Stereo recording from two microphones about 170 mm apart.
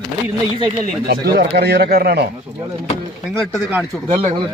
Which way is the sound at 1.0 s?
70° right (ahead or behind).